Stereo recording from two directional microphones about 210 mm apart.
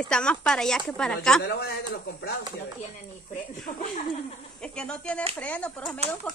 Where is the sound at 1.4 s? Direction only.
50° left (ahead or behind).